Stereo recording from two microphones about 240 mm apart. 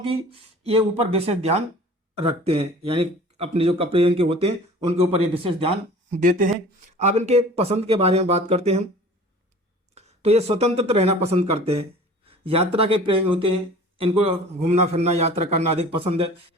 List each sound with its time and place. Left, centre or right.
0.0 s speech: right
9.9 s speech: right